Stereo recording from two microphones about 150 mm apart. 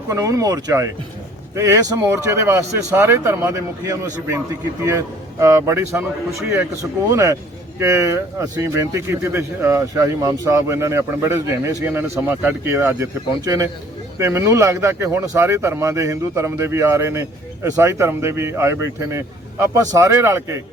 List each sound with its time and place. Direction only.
0.1 s speech: 20° right (ahead or behind)